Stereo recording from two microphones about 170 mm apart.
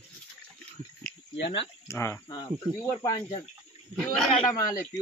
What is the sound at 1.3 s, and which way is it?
Speech, 90° left.